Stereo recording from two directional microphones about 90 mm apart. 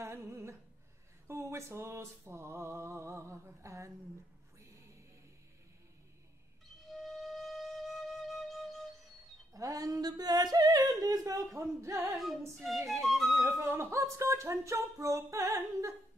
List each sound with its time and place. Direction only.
0.0 s humming: 30° right (ahead or behind)
1.2 s a sound: 30° right (ahead or behind)
6.9 s flute: centre (ahead or behind)
9.5 s speech: 40° right (ahead or behind)
12.1 s music: centre (ahead or behind)
13.6 s a sound: 30° right (ahead or behind)